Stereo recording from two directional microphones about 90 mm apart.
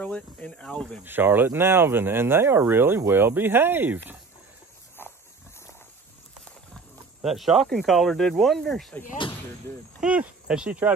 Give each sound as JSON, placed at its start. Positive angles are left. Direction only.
{"t": 0.0, "sound": "speech", "side_deg": 15}
{"t": 1.0, "sound": "speech", "side_deg": -20}
{"t": 5.0, "sound": "dog", "side_deg": 25}
{"t": 7.2, "sound": "speech", "side_deg": 0}
{"t": 9.9, "sound": "speech", "side_deg": -15}